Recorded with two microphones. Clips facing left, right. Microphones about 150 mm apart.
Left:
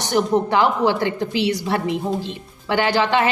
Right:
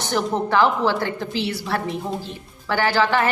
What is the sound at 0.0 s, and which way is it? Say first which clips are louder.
A woman's voice: left 4 dB; 15° left (ahead or behind).